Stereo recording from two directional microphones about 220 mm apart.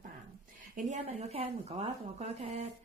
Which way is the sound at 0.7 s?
35° right (ahead or behind).